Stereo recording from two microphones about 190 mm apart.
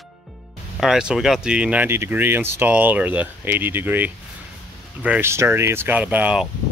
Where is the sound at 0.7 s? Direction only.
5° right (ahead or behind).